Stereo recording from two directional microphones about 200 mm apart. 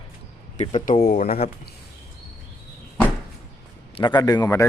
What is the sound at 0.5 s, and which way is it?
Speech, 35° left (ahead or behind).